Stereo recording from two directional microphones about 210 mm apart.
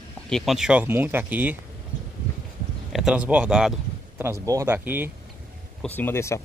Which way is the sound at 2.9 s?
Centre (ahead or behind).